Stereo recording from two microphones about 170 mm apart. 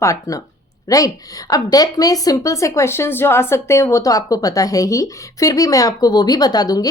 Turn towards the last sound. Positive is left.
turn(degrees=20)  # may be behind; listen again after turning